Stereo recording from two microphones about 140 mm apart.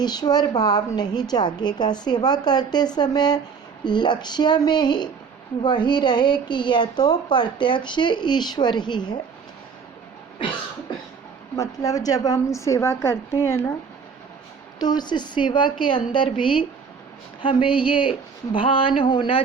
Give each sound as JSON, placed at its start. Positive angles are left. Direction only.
{"t": 0.0, "sound": "a woman's voice", "side_deg": 30}
{"t": 10.4, "sound": "cough", "side_deg": 40}
{"t": 11.5, "sound": "a woman's voice", "side_deg": 25}
{"t": 14.8, "sound": "a woman's voice", "side_deg": 30}